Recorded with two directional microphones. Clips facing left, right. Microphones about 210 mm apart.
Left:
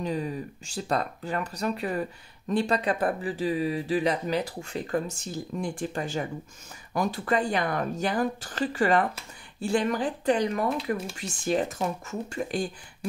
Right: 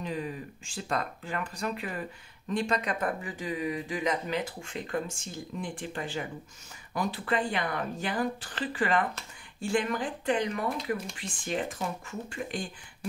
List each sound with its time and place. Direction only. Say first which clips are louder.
0.0 s speech: left 5 dB; 35° left (ahead or behind)